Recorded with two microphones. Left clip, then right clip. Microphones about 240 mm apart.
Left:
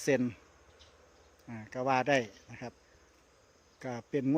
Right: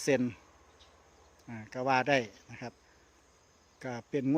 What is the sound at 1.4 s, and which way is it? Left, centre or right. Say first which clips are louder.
Speech: right 1 dB; centre.